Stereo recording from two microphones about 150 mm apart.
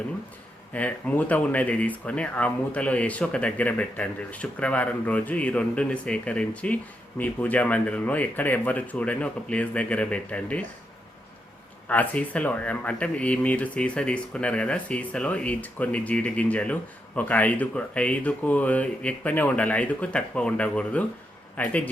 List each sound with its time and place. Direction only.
0.7 s speech: 10° left (ahead or behind)
11.9 s a man's voice: 10° left (ahead or behind)